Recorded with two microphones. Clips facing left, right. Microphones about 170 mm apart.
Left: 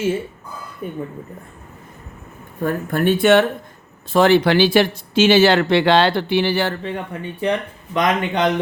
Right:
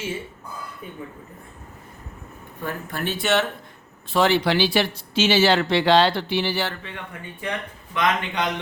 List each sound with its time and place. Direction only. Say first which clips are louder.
0.8 s speech: left 9 dB; 45° left (ahead or behind)
2.6 s speech: left 9 dB; 50° left (ahead or behind)
6.8 s speech: left 10 dB; 35° left (ahead or behind)